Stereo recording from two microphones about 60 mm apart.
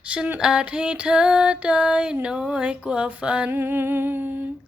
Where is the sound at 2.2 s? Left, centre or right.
Centre.